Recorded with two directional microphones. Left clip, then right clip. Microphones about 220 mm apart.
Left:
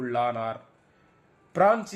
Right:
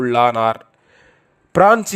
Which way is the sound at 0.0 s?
55° right (ahead or behind).